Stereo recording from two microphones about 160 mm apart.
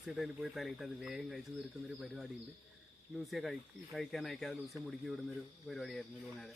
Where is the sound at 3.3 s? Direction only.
Centre (ahead or behind).